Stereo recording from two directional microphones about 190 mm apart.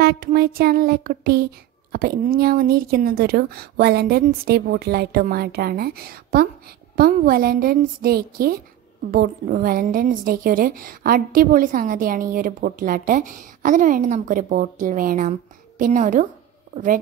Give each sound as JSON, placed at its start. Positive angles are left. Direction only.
{"t": 0.0, "sound": "a woman's voice", "side_deg": -55}